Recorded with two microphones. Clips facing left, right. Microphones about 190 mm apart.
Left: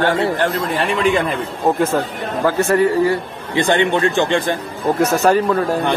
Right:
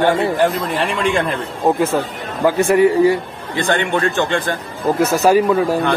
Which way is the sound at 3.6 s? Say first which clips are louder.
Left 2 dB; 20° left (ahead or behind).